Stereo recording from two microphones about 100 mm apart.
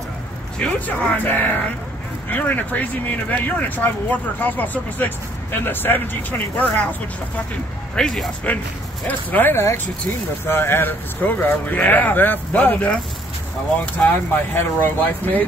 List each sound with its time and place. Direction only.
0.6 s speech: 15° left (ahead or behind)
7.9 s speech: 5° left (ahead or behind)
9.0 s speech: 15° left (ahead or behind)